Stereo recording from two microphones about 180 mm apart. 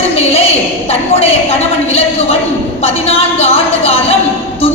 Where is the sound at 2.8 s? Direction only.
35° left (ahead or behind).